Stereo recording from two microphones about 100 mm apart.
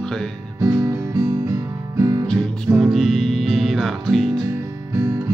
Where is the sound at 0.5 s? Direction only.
35° right (ahead or behind).